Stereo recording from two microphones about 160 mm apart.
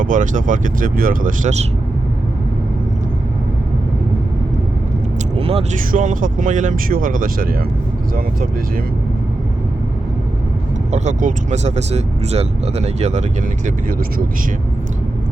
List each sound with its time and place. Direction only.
0.0 s speech: 55° right (ahead or behind)
5.4 s vehicle: 40° right (ahead or behind)
5.9 s speech: 55° right (ahead or behind)
10.9 s speech: 50° right (ahead or behind)